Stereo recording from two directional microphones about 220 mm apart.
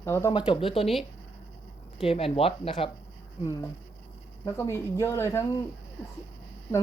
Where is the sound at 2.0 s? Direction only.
25° left (ahead or behind).